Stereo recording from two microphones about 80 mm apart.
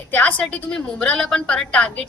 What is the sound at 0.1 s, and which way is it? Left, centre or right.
A woman's voice, centre.